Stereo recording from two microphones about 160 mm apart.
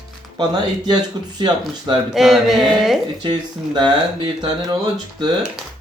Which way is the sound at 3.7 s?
30° right (ahead or behind).